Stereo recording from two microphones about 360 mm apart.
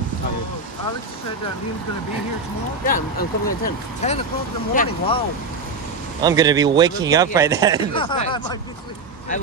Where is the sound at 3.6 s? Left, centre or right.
Centre.